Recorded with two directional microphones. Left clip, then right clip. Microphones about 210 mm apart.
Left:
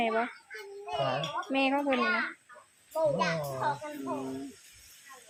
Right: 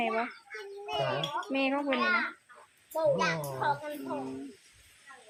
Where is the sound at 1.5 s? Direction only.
10° left (ahead or behind).